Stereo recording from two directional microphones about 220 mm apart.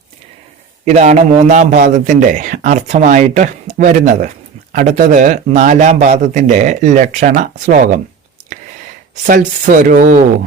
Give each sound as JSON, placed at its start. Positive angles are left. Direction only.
{"t": 0.9, "sound": "a man's voice", "side_deg": -30}